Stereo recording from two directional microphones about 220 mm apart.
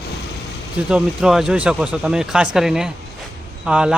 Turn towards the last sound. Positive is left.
turn(degrees=-5)  # may be behind; listen again after turning